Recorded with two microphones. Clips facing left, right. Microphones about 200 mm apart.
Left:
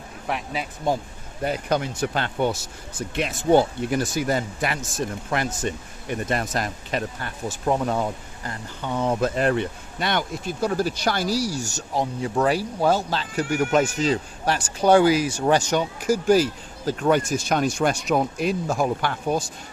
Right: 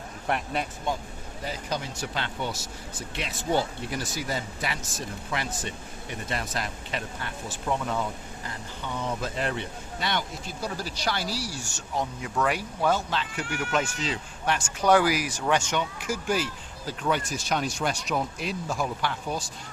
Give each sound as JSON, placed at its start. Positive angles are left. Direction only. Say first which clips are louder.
{"t": 0.3, "sound": "speech", "louder": "even", "side_deg": 0}
{"t": 1.4, "sound": "speech", "louder": "left 9 dB", "side_deg": 60}